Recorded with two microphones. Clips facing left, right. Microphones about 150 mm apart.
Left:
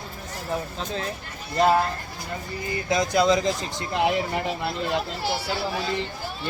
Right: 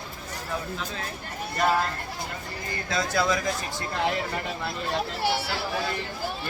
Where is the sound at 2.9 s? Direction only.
20° left (ahead or behind).